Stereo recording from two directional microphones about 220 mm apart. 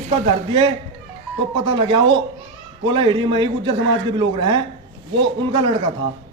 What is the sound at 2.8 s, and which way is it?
A man's voice, 20° right (ahead or behind).